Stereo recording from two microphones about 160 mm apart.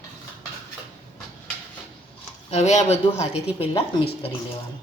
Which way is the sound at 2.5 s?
45° left (ahead or behind).